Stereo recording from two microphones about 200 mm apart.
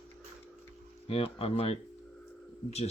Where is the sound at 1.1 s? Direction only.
30° left (ahead or behind).